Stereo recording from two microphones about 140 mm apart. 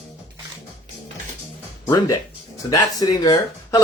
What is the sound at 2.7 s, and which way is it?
Speech, 25° left (ahead or behind).